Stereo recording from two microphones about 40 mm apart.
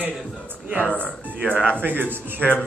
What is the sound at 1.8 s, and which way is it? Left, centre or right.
Speech, right.